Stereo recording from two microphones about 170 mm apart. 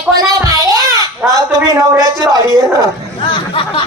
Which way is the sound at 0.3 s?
20° right (ahead or behind).